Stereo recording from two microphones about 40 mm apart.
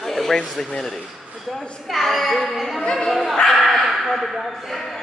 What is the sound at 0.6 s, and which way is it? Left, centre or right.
Speech, centre.